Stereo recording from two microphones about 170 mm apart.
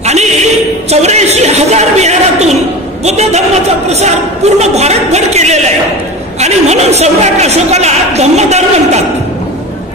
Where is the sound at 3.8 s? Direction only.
40° right (ahead or behind).